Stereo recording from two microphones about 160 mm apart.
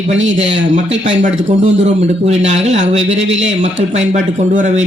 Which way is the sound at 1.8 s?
40° right (ahead or behind).